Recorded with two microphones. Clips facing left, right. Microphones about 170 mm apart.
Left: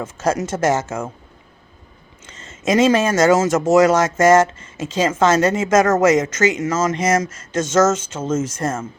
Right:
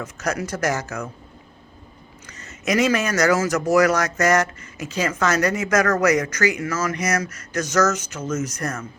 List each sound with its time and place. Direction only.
0.0 s speech: 25° left (ahead or behind)
2.2 s speech: 25° left (ahead or behind)